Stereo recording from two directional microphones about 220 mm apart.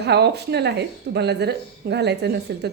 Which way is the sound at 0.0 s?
50° right (ahead or behind).